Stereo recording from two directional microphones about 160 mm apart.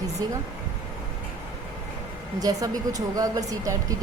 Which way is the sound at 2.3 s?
25° right (ahead or behind).